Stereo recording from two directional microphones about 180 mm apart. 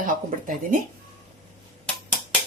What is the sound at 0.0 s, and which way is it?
Speech, 50° right (ahead or behind).